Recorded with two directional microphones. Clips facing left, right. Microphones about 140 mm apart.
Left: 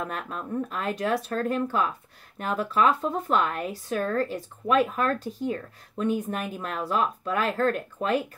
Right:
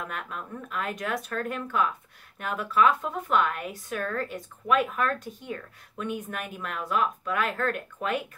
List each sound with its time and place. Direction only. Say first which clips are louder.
0.0 s speech: left 3 dB; 35° left (ahead or behind)